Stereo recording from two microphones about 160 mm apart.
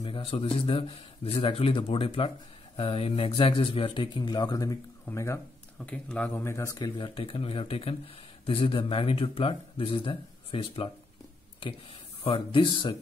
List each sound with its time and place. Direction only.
0.0 s speech: 35° left (ahead or behind)
12.2 s speech: 35° left (ahead or behind)